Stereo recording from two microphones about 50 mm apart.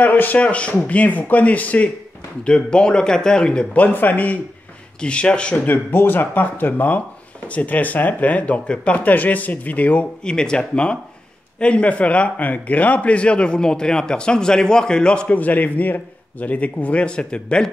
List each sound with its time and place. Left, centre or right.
0.0 s speech: left
2.4 s a man's voice: centre
3.7 s speech: left
5.0 s a man's voice: left
5.7 s speech: left
10.2 s a man's voice: centre
15.3 s speech: left